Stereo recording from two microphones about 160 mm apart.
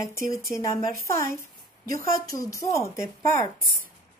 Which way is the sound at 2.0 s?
65° right (ahead or behind).